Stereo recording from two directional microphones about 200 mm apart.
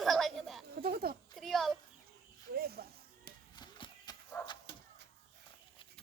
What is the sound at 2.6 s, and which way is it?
Snake, 50° right (ahead or behind).